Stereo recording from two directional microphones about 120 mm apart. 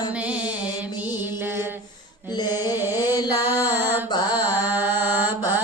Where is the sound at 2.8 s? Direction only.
20° right (ahead or behind).